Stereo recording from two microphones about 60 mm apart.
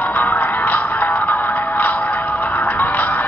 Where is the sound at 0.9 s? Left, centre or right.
Left.